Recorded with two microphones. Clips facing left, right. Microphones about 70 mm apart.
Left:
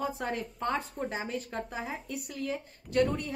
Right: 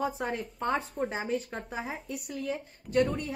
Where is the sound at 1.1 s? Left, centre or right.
Centre.